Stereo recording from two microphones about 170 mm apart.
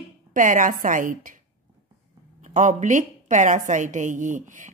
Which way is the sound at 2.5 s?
45° right (ahead or behind).